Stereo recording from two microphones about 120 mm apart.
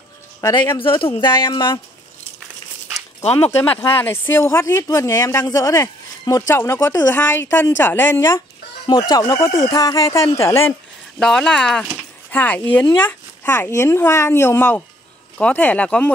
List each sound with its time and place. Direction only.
0.7 s speech: 45° left (ahead or behind)
3.4 s speech: 15° left (ahead or behind)
8.8 s speech: 40° left (ahead or behind)
9.2 s speech: 25° left (ahead or behind)
11.1 s speech: 5° left (ahead or behind)